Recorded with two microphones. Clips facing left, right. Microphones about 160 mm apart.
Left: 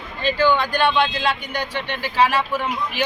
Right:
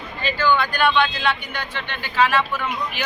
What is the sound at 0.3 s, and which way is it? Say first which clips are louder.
Speech: left 1 dB; 35° left (ahead or behind).